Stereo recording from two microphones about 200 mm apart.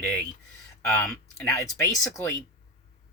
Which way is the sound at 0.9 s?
15° left (ahead or behind).